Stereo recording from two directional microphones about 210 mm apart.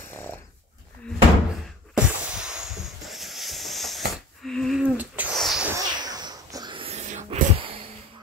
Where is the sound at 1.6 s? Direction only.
5° right (ahead or behind).